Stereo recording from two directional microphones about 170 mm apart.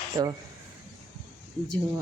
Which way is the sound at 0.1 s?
20° right (ahead or behind).